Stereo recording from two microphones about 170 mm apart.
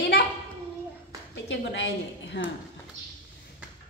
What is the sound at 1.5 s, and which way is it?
A woman's voice, 90° left.